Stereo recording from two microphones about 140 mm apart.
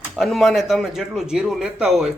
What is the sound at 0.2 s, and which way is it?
A man's voice, centre (ahead or behind).